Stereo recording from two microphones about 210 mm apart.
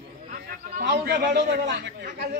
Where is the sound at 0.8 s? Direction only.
50° right (ahead or behind).